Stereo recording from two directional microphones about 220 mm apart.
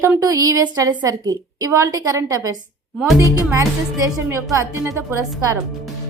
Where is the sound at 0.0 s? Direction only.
15° right (ahead or behind).